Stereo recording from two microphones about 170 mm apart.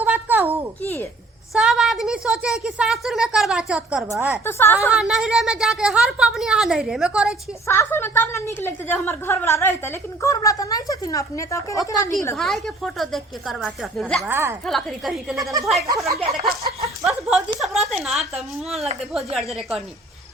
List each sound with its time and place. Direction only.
0.0 s a sound: 10° right (ahead or behind)
1.5 s a woman's voice: 5° right (ahead or behind)
4.4 s a woman's voice: 15° left (ahead or behind)
4.9 s a woman's voice: 5° right (ahead or behind)
7.7 s a woman's voice: 15° left (ahead or behind)
12.4 s a woman's voice: centre (ahead or behind)
14.2 s speech: 15° right (ahead or behind)
14.7 s a woman's voice: centre (ahead or behind)
17.1 s a sound: centre (ahead or behind)
19.1 s a woman's voice: centre (ahead or behind)